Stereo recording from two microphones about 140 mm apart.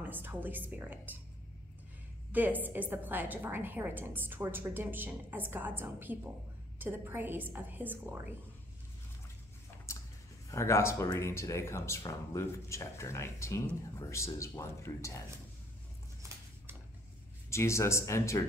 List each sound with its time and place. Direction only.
0.0 s a woman's voice: 15° right (ahead or behind)
2.3 s a woman's voice: 10° right (ahead or behind)
10.5 s speech: 20° left (ahead or behind)
16.2 s a sound: 20° right (ahead or behind)
17.5 s speech: 20° left (ahead or behind)